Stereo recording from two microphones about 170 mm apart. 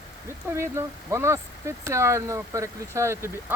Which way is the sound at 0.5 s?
15° right (ahead or behind).